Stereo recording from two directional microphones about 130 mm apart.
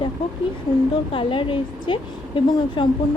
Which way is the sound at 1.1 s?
40° left (ahead or behind).